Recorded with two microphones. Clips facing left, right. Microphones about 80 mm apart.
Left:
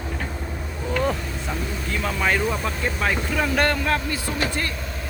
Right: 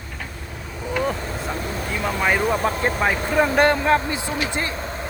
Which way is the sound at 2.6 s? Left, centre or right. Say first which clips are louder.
Right 5 dB; right.